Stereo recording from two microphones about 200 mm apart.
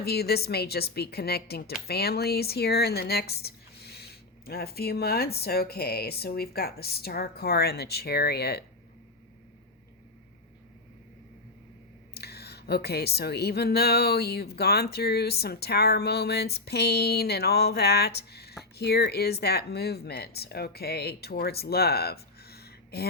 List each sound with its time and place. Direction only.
0.0 s a woman's voice: 50° left (ahead or behind)
12.1 s a woman's voice: 55° left (ahead or behind)